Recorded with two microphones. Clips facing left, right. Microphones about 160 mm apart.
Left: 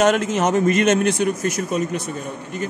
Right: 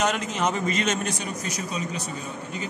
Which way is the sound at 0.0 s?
60° left (ahead or behind).